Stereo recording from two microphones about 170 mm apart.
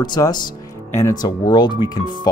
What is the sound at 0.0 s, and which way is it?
Speech, 25° left (ahead or behind).